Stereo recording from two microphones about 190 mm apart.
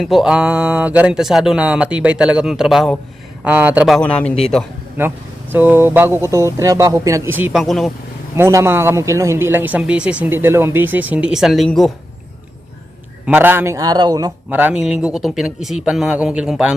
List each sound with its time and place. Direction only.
0.0 s speech: centre (ahead or behind)
4.9 s speech: 10° right (ahead or behind)
8.4 s speech: 15° right (ahead or behind); by 11.9 s centre (ahead or behind)
13.2 s speech: 10° right (ahead or behind)
14.5 s speech: 5° right (ahead or behind)